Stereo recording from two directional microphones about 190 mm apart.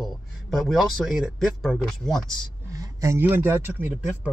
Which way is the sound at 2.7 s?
15° right (ahead or behind).